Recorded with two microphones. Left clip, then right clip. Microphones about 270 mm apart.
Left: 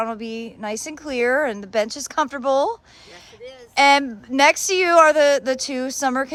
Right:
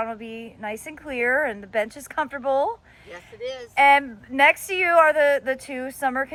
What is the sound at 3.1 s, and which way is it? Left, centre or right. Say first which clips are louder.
Speech: right 7 dB; centre.